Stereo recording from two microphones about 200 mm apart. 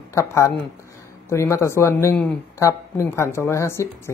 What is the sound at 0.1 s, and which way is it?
Speech, 15° left (ahead or behind).